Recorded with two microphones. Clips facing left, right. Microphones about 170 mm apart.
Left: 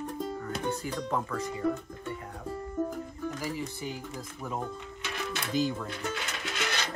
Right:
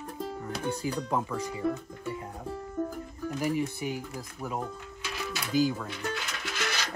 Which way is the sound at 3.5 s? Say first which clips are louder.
Right 5 dB; 15° right (ahead or behind).